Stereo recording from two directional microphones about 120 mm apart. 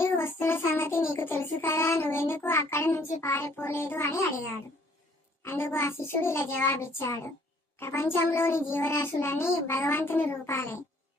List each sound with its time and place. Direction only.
0.0 s child singing: 20° left (ahead or behind)
5.4 s a child's voice: 20° left (ahead or behind)